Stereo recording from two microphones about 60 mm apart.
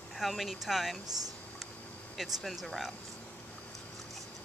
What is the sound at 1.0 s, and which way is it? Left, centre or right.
Speech, right.